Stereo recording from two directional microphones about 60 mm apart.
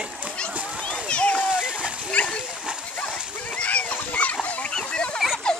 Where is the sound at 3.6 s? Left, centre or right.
Left.